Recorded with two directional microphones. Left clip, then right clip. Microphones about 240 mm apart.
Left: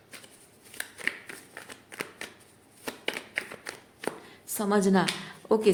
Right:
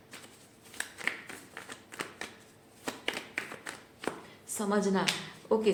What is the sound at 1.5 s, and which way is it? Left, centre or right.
Shuffling cards, centre.